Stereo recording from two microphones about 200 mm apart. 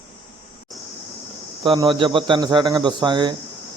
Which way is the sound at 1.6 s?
25° right (ahead or behind).